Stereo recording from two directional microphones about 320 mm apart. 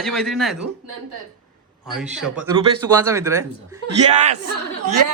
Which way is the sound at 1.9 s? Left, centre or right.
Centre.